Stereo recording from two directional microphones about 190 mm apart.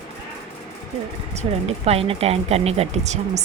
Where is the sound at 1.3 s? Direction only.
35° right (ahead or behind).